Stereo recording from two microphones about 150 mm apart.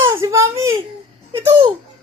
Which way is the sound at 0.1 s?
20° right (ahead or behind).